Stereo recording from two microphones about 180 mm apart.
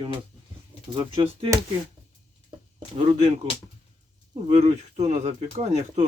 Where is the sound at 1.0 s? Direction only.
30° right (ahead or behind).